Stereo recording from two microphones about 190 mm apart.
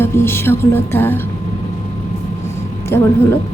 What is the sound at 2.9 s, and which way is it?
Speech, 15° left (ahead or behind).